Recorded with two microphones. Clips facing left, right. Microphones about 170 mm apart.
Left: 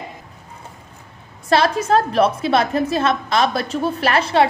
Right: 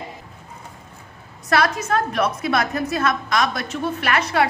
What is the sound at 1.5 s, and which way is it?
A woman's voice, 30° left (ahead or behind).